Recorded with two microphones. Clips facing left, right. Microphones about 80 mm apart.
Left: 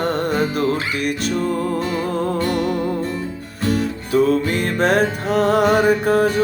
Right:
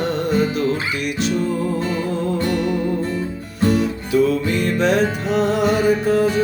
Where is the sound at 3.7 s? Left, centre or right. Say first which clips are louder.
Even; left.